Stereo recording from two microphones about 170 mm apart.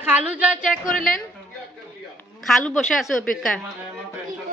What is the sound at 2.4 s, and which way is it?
Speech, centre (ahead or behind).